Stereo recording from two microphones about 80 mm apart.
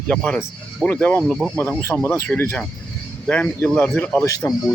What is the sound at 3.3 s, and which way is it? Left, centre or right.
Speech, centre.